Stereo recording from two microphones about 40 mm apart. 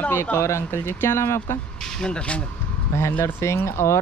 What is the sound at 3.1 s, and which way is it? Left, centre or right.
Speech, left.